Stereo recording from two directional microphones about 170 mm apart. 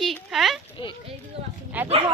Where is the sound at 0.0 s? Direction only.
Centre (ahead or behind).